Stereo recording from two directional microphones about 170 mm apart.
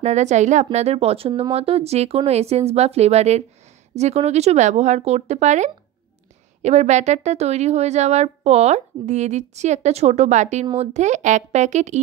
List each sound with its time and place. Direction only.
0.0 s a woman's voice: 45° right (ahead or behind)